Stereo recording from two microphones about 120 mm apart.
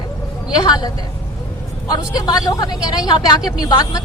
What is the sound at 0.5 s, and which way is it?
Speech, 35° left (ahead or behind).